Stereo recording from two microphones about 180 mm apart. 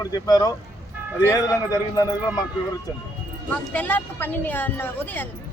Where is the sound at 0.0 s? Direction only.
20° left (ahead or behind).